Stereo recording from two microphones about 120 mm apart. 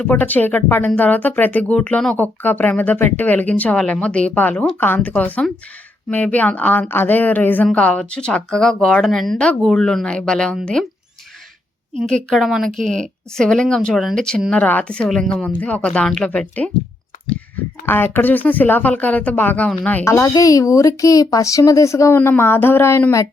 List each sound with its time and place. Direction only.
0.1 s speech: 15° left (ahead or behind)
12.0 s speech: 5° left (ahead or behind)
17.8 s speech: 20° left (ahead or behind)
20.1 s a woman's voice: 25° left (ahead or behind)